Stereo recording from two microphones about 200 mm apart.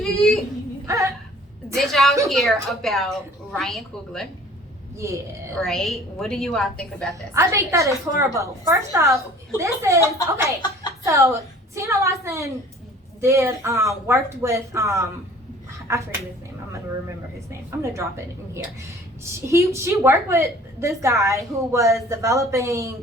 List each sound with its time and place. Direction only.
0.0 s a sound: centre (ahead or behind)
0.9 s whimper: 15° right (ahead or behind)
1.7 s a woman's voice: centre (ahead or behind)
4.9 s a woman's voice: 15° right (ahead or behind)
5.5 s a woman's voice: centre (ahead or behind)
7.3 s a woman's voice: 15° right (ahead or behind)
17.7 s a woman's voice: 15° right (ahead or behind)